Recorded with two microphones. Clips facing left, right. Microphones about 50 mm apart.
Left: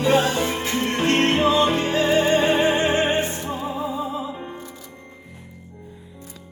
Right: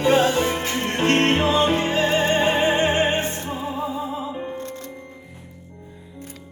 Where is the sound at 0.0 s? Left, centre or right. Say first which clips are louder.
Right 1 dB; right.